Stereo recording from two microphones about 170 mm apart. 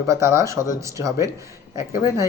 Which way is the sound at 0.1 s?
20° right (ahead or behind).